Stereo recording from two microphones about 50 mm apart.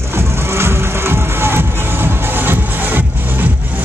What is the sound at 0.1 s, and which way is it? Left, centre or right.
Music, right.